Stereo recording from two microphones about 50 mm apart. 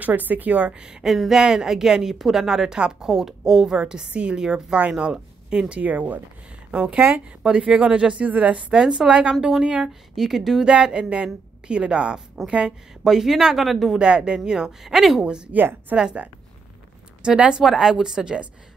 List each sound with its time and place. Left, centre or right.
0.0 s speech: right
1.0 s a woman's voice: centre
5.8 s speech: right
6.7 s speech: right
8.7 s a woman's voice: centre
13.0 s a woman's voice: centre
13.9 s a woman's voice: centre
15.5 s speech: right
16.0 s a woman's voice: centre